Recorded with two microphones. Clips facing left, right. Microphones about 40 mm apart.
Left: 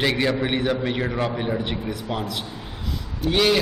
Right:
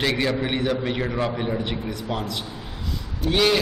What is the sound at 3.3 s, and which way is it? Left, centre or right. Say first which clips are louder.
Speech: left 1 dB; centre.